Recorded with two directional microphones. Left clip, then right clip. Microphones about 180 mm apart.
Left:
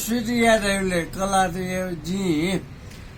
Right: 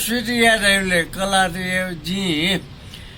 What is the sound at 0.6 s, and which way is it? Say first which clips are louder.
Speech: right 7 dB; 20° right (ahead or behind).